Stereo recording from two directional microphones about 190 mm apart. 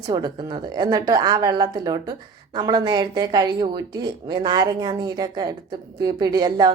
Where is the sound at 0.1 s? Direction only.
20° right (ahead or behind).